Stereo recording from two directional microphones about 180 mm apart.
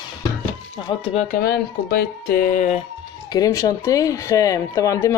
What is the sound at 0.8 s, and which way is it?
Speech, 30° left (ahead or behind).